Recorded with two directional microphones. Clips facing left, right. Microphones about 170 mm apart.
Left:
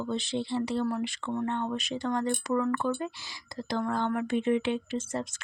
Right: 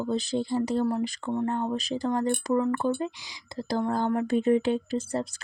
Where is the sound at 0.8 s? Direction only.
30° right (ahead or behind).